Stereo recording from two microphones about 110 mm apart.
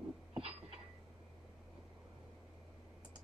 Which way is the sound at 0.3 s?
60° right (ahead or behind).